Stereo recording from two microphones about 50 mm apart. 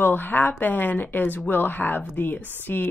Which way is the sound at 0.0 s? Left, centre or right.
Left.